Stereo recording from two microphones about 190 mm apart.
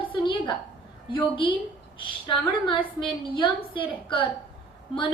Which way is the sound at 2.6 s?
25° left (ahead or behind).